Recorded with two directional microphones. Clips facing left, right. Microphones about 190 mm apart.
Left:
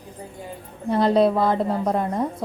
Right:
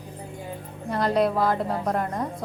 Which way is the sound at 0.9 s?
25° left (ahead or behind).